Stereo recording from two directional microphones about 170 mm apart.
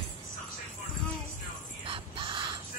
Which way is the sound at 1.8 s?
30° right (ahead or behind).